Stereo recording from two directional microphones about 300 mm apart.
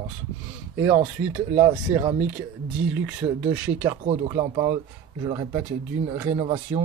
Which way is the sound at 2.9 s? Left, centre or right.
Centre.